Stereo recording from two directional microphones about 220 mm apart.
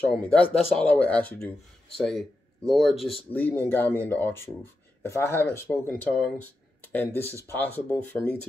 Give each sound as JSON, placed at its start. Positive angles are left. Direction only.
{"t": 0.0, "sound": "speech", "side_deg": 5}